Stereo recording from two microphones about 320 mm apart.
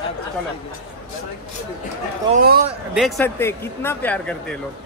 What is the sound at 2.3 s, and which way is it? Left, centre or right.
Speech, right.